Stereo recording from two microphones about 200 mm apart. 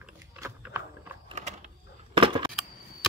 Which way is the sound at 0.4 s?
15° right (ahead or behind).